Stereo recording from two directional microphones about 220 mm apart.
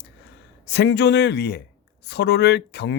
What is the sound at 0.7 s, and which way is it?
Speech, 50° left (ahead or behind).